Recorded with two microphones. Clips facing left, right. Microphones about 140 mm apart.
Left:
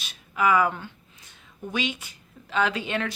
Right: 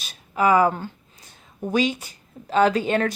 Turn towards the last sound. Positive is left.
turn(degrees=-40)  # may be behind; listen again after turning